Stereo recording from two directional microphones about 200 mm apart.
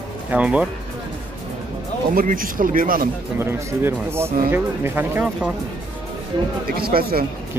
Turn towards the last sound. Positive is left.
turn(degrees=-50)  # may be behind; listen again after turning